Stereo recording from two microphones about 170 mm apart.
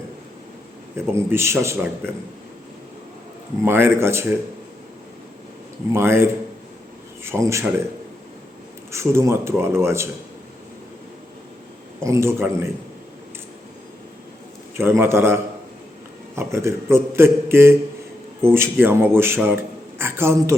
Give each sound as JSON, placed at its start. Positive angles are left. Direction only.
{"t": 0.9, "sound": "a man's voice", "side_deg": -15}
{"t": 3.6, "sound": "a man's voice", "side_deg": -15}
{"t": 5.9, "sound": "a man's voice", "side_deg": -15}
{"t": 8.9, "sound": "a man's voice", "side_deg": -15}
{"t": 12.0, "sound": "a man's voice", "side_deg": -15}
{"t": 14.8, "sound": "a man's voice", "side_deg": -15}